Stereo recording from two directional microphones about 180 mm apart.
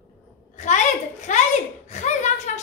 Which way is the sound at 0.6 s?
40° left (ahead or behind).